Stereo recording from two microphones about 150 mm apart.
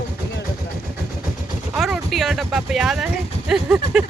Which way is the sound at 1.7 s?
Centre (ahead or behind).